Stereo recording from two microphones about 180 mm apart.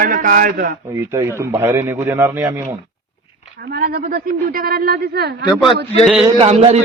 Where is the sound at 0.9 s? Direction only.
15° right (ahead or behind).